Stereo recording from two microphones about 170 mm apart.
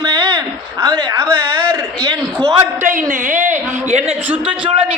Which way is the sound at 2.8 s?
50° right (ahead or behind).